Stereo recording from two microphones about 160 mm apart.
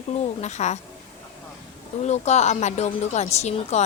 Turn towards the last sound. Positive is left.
turn(degrees=45)  # may be behind; listen again after turning